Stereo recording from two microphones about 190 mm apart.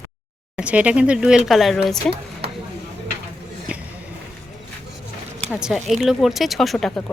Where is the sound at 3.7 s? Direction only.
5° right (ahead or behind).